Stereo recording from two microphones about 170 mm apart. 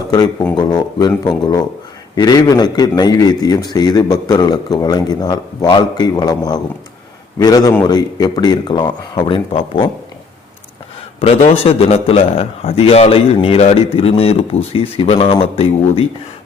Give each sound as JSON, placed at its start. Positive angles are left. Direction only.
{"t": 0.5, "sound": "a man's voice", "side_deg": 25}
{"t": 11.2, "sound": "a man's voice", "side_deg": 35}